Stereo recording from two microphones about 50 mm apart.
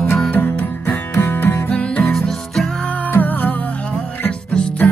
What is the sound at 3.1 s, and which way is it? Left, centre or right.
Music, left.